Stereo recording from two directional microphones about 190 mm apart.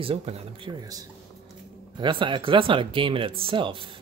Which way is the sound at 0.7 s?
20° right (ahead or behind).